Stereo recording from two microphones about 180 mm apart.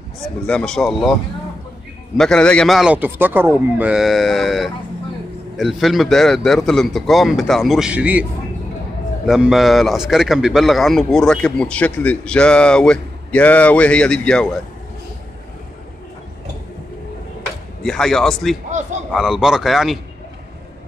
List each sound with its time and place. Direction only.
0.5 s a man's voice: 5° left (ahead or behind)
2.1 s a man's voice: 5° left (ahead or behind)
17.8 s a man's voice: 5° left (ahead or behind)